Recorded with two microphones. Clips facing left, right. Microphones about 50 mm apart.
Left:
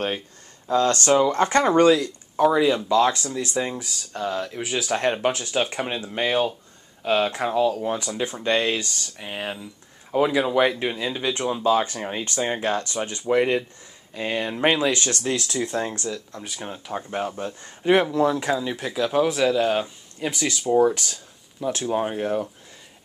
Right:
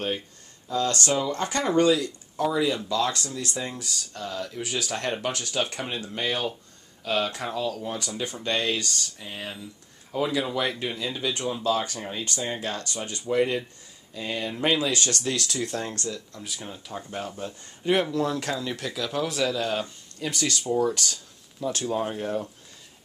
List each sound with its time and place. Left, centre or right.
0.7 s speech: left
9.2 s speech: left
10.1 s speech: left
15.3 s speech: centre
16.5 s speech: left